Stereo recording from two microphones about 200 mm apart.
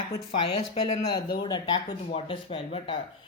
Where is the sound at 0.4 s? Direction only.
30° left (ahead or behind).